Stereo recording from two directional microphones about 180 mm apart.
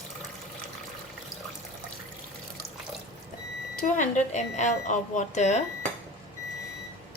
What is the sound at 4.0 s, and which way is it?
A woman's voice, 40° left (ahead or behind).